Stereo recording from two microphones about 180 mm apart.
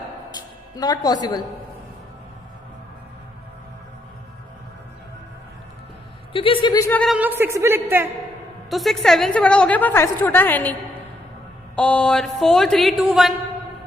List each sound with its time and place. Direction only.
0.3 s a woman's voice: 20° left (ahead or behind)
6.3 s a woman's voice: 30° left (ahead or behind)
7.2 s a woman's voice: 10° right (ahead or behind)
8.7 s a woman's voice: centre (ahead or behind)
11.8 s speech: 5° left (ahead or behind)